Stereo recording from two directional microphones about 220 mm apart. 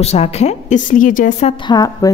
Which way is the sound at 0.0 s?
30° left (ahead or behind).